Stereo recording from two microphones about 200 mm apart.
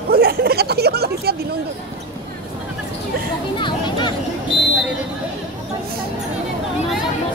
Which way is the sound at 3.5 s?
25° left (ahead or behind).